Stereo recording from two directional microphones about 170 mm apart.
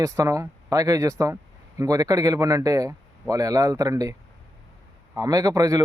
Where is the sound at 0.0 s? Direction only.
20° right (ahead or behind).